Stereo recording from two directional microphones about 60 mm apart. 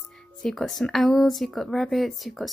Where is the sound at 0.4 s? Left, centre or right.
Centre.